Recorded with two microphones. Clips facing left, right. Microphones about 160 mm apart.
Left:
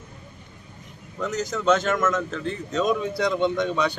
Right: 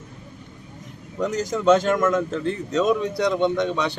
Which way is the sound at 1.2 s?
10° right (ahead or behind).